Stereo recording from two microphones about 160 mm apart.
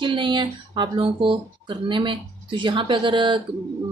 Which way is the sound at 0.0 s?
30° right (ahead or behind).